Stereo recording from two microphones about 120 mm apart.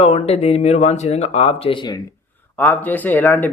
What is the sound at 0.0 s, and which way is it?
Speech, 60° left (ahead or behind).